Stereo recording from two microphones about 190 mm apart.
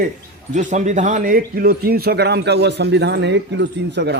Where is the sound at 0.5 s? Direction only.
40° right (ahead or behind).